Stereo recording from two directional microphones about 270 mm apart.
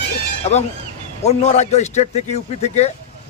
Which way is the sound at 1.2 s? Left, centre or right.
Left.